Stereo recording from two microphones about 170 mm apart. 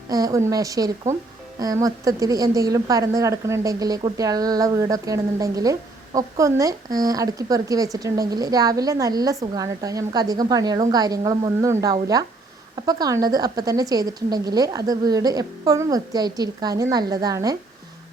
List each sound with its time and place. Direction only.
0.1 s a woman's voice: 20° right (ahead or behind)